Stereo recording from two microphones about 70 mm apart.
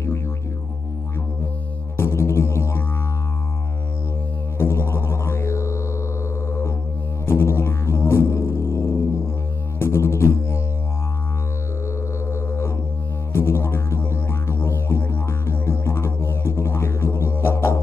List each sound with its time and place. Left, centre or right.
2.0 s music: left
4.6 s music: left
7.2 s music: left
12.3 s music: left